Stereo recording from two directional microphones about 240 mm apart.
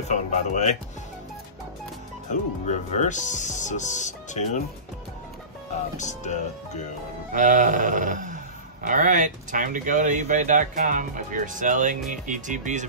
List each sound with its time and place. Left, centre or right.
0.1 s speech: left
2.3 s speech: left
5.9 s speech: left
7.3 s speech: right